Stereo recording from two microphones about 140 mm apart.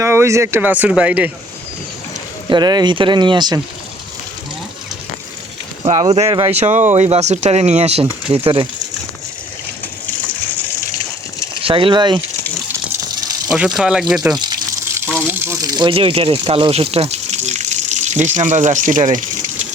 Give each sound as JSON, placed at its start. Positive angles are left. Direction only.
{"t": 0.0, "sound": "speech", "side_deg": -20}
{"t": 2.5, "sound": "speech", "side_deg": -30}
{"t": 5.9, "sound": "speech", "side_deg": -45}
{"t": 6.5, "sound": "speech", "side_deg": -55}
{"t": 11.6, "sound": "speech", "side_deg": -40}
{"t": 13.5, "sound": "speech", "side_deg": 0}
{"t": 14.9, "sound": "water", "side_deg": -15}
{"t": 15.6, "sound": "a sound", "side_deg": -25}
{"t": 15.9, "sound": "speech", "side_deg": -40}